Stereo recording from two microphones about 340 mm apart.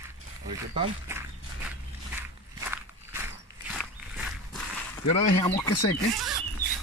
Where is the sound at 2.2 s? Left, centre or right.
Centre.